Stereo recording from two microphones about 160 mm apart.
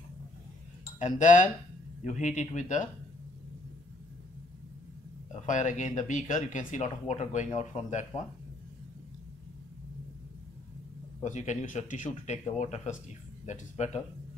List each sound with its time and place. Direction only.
0.9 s speech: 50° left (ahead or behind)
5.3 s speech: 50° left (ahead or behind)
11.2 s speech: 50° left (ahead or behind)